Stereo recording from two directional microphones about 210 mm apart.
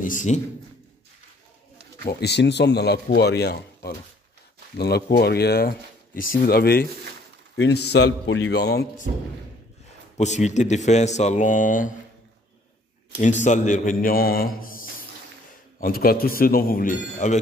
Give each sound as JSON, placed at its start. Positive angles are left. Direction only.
{"t": 0.0, "sound": "a man's voice", "side_deg": 35}
{"t": 2.0, "sound": "speech", "side_deg": 50}
{"t": 10.1, "sound": "speech", "side_deg": 35}
{"t": 13.2, "sound": "speech", "side_deg": 35}